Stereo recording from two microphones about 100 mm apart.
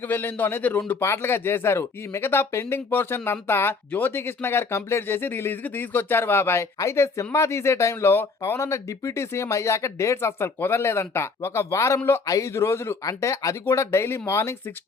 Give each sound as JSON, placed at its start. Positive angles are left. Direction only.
{"t": 0.1, "sound": "speech", "side_deg": 20}